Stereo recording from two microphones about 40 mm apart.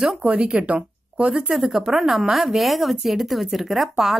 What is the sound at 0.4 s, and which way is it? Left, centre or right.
Speech, right.